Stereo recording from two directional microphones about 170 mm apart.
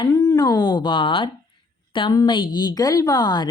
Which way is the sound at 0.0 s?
15° left (ahead or behind).